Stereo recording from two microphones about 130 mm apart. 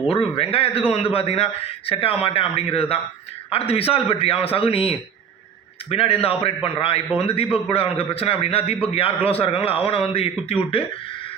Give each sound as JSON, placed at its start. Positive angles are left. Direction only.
{"t": 0.1, "sound": "a man's voice", "side_deg": 45}